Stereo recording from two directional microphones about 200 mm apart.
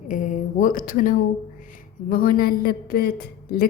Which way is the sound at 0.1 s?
40° left (ahead or behind).